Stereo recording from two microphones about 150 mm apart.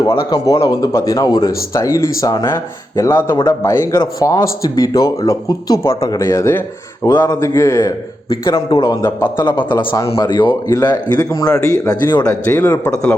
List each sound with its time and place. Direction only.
0.1 s speech: 35° left (ahead or behind)
0.7 s a man's voice: 25° left (ahead or behind)
12.5 s a man's voice: 10° left (ahead or behind)